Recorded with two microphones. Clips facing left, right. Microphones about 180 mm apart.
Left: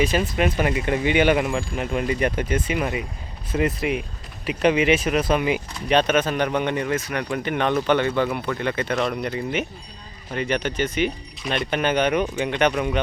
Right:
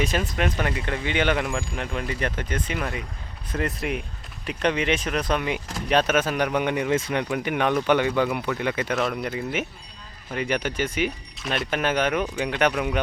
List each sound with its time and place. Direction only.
0.0 s speech: centre (ahead or behind)
6.9 s speech: 25° right (ahead or behind)
7.3 s speech: 10° right (ahead or behind)